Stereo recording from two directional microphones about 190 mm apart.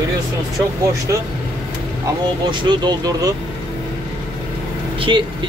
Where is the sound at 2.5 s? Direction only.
25° right (ahead or behind).